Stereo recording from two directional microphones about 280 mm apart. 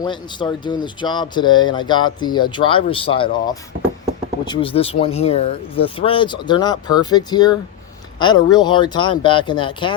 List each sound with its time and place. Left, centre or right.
0.0 s speech: centre